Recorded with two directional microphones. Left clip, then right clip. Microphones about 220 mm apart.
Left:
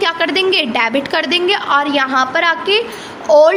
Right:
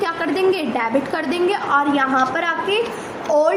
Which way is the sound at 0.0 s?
45° left (ahead or behind).